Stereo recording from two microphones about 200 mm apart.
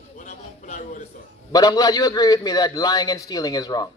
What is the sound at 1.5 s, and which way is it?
A man's voice, 20° left (ahead or behind).